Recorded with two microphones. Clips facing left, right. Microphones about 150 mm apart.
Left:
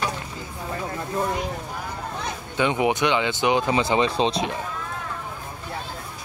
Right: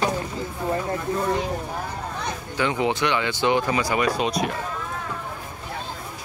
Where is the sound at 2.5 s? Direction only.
20° left (ahead or behind).